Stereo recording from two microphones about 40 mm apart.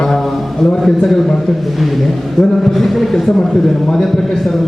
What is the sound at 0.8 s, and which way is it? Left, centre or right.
Speech, centre.